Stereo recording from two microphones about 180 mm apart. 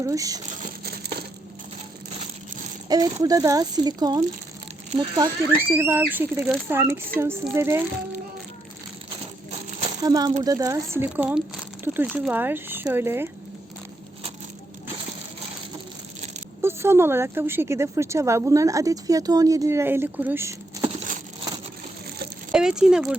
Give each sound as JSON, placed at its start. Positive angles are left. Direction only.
{"t": 0.0, "sound": "speech", "side_deg": -20}
{"t": 1.0, "sound": "crumpling", "side_deg": -65}
{"t": 2.9, "sound": "speech", "side_deg": -20}
{"t": 5.5, "sound": "speech", "side_deg": -10}
{"t": 10.0, "sound": "speech", "side_deg": -20}
{"t": 16.6, "sound": "speech", "side_deg": -15}
{"t": 22.5, "sound": "speech", "side_deg": -5}